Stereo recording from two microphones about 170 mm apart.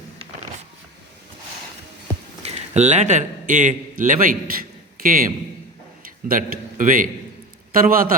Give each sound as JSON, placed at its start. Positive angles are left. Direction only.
{"t": 2.4, "sound": "a man's voice", "side_deg": -40}
{"t": 4.9, "sound": "a sound", "side_deg": -55}
{"t": 6.2, "sound": "a man's voice", "side_deg": -55}